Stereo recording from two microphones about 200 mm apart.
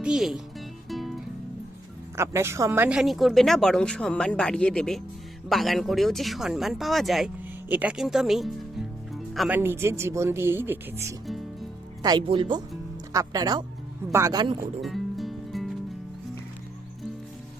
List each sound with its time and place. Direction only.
0.0 s speech: 5° right (ahead or behind)
0.9 s music: centre (ahead or behind)
2.1 s speech: 15° right (ahead or behind)
9.6 s speech: 10° right (ahead or behind)
12.0 s speech: 20° right (ahead or behind)
14.8 s music: centre (ahead or behind)